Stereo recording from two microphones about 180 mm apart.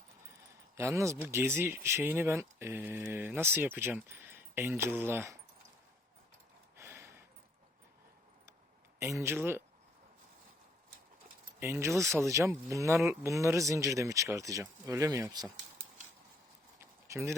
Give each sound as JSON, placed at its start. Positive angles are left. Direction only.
{"t": 0.8, "sound": "speech", "side_deg": -15}
{"t": 6.7, "sound": "a sound", "side_deg": -15}
{"t": 9.0, "sound": "speech", "side_deg": -15}
{"t": 11.6, "sound": "speech", "side_deg": -15}
{"t": 17.1, "sound": "speech", "side_deg": -15}